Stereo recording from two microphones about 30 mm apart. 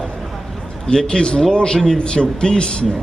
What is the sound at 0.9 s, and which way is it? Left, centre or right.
A man's voice, left.